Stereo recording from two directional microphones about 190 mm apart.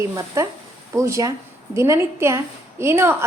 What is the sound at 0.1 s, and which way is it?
A woman's voice, 15° right (ahead or behind).